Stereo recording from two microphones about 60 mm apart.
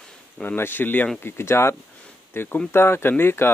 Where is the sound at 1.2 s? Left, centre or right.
Left.